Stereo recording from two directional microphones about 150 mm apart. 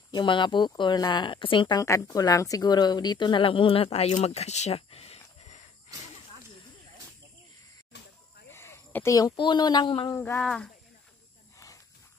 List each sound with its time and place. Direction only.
0.1 s speech: 30° left (ahead or behind)
1.8 s speech: 20° left (ahead or behind); by 5.6 s 45° left (ahead or behind)
7.9 s snake: 90° left
8.5 s speech: 15° left (ahead or behind)
10.1 s speech: 20° left (ahead or behind)
10.4 s speech: 5° left (ahead or behind)
11.5 s a sound: 20° left (ahead or behind)